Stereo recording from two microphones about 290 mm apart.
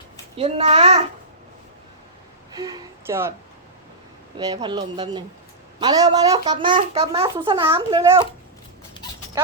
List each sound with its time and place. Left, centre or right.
0.3 s a child's voice: right
2.6 s a child's voice: centre
4.4 s a child's voice: centre